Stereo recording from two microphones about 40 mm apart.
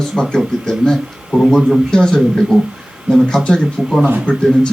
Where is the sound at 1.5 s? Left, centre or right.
Centre.